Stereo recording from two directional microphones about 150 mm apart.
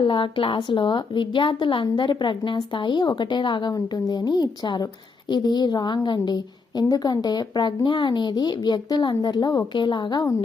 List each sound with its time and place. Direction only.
0.0 s a woman's voice: 35° left (ahead or behind)